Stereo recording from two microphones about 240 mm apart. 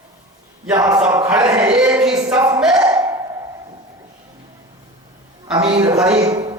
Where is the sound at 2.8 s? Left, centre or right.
Centre.